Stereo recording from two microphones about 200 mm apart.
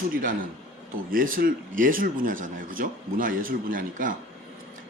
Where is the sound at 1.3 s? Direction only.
45° right (ahead or behind).